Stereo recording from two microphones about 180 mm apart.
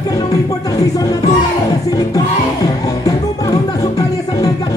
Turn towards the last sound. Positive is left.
turn(degrees=20)  # may be behind; listen again after turning